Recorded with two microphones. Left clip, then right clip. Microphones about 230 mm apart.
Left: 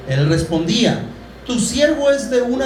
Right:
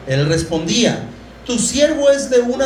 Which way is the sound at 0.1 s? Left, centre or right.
Right.